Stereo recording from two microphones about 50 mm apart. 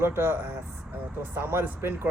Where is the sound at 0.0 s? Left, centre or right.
Right.